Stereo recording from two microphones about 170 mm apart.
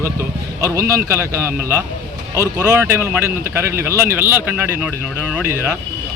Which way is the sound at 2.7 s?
15° right (ahead or behind).